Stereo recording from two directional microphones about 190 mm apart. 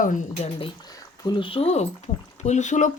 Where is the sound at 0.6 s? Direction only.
20° left (ahead or behind).